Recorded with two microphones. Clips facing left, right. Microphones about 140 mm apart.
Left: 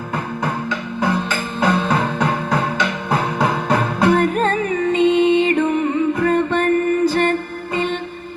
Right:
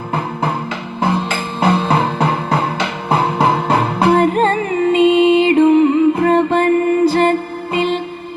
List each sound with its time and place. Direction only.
0.1 s music: 30° right (ahead or behind)
4.9 s music: 90° right
5.4 s music: 25° right (ahead or behind)